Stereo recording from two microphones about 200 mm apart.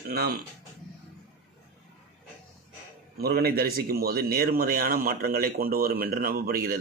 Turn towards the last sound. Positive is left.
turn(degrees=-45)  # may be behind; listen again after turning